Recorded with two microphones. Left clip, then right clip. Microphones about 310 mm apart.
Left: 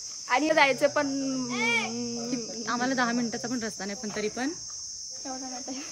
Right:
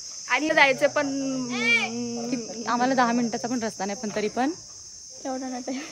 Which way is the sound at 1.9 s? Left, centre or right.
Centre.